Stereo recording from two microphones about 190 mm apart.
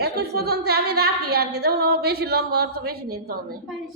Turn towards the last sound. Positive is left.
turn(degrees=-55)  # may be behind; listen again after turning